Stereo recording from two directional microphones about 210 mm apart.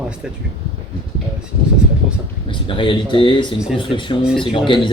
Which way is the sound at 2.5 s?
25° left (ahead or behind).